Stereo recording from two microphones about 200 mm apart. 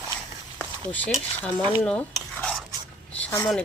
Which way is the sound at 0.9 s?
5° left (ahead or behind).